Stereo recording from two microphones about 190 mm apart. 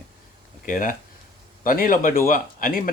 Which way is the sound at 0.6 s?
45° left (ahead or behind).